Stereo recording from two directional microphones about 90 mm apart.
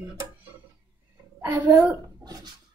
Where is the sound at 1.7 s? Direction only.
45° right (ahead or behind).